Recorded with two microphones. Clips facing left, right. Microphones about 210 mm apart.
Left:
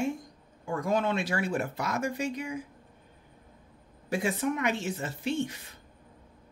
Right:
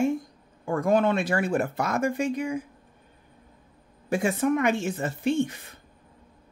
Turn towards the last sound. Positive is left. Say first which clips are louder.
# right 6 dB
turn(degrees=-50)  # may be behind; listen again after turning